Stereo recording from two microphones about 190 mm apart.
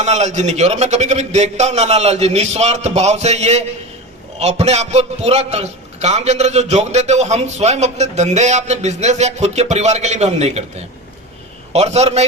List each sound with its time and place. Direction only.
0.0 s a man's voice: 35° right (ahead or behind)